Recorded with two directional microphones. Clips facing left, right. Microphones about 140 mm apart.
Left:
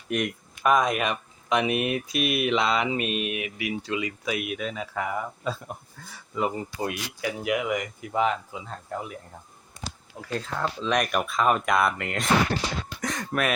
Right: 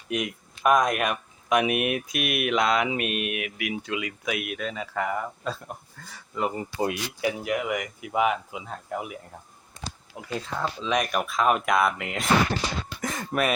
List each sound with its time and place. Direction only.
0.1 s speech: centre (ahead or behind)
6.7 s speech: 25° right (ahead or behind)
7.4 s speech: centre (ahead or behind)
10.4 s speech: centre (ahead or behind)